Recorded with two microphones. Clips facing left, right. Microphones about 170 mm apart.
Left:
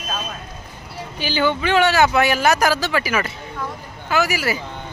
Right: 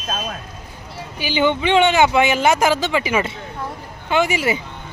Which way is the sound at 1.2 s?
20° right (ahead or behind).